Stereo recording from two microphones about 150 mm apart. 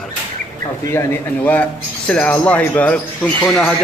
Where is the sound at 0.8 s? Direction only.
15° left (ahead or behind).